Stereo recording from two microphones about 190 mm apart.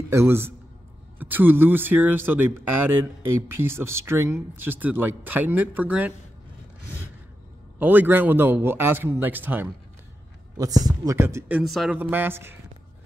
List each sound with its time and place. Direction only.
0.1 s speech: 15° right (ahead or behind)
7.8 s speech: 10° right (ahead or behind)